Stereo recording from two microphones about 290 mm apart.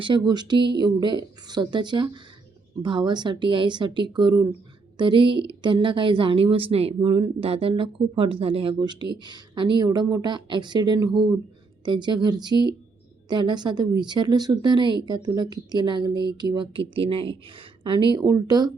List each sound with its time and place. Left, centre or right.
0.0 s a woman's voice: centre